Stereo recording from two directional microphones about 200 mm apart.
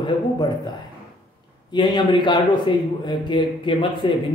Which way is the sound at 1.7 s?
20° left (ahead or behind).